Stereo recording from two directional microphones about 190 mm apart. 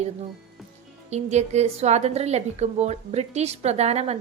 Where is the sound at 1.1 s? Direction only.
35° right (ahead or behind).